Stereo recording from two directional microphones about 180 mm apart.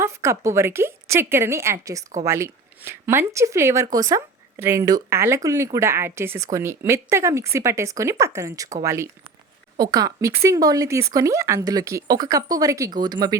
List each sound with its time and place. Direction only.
0.0 s speech: 15° right (ahead or behind)